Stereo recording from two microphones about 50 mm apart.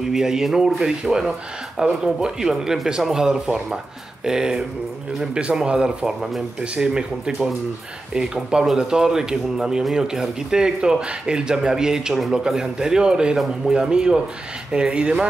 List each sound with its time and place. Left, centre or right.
0.1 s speech: centre